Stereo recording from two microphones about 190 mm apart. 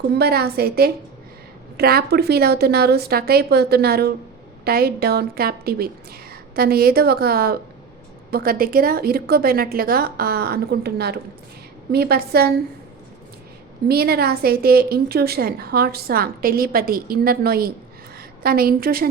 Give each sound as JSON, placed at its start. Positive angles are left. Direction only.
{"t": 0.2, "sound": "a woman's voice", "side_deg": -55}
{"t": 13.8, "sound": "a woman's voice", "side_deg": -55}